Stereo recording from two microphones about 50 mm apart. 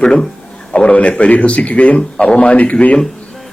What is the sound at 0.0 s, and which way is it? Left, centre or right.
A man's voice, centre.